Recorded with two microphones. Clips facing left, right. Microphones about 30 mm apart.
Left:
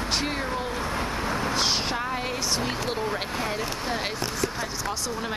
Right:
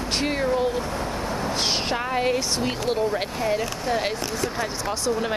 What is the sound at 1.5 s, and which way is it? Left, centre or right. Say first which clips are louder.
Speech: right 3 dB; centre.